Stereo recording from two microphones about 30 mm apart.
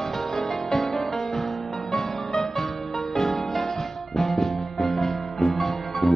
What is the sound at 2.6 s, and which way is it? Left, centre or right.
Music, centre.